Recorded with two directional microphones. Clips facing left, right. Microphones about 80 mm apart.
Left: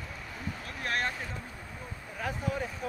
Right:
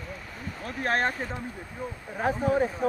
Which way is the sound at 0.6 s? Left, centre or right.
Right.